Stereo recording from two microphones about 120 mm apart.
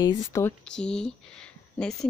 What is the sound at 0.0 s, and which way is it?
Speech, 25° left (ahead or behind).